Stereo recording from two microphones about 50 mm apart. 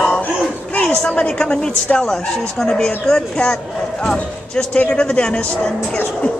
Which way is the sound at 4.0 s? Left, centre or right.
Centre.